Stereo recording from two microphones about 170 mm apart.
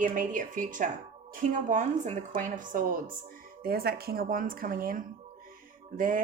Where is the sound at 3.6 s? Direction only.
65° right (ahead or behind).